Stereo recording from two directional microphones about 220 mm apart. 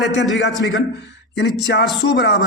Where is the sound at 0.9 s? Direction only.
50° left (ahead or behind).